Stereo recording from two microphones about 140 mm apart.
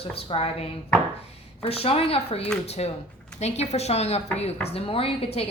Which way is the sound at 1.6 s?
45° left (ahead or behind).